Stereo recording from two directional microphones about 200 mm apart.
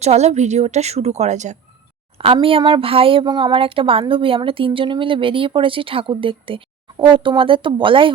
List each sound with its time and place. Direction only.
0.0 s a woman's voice: 35° right (ahead or behind)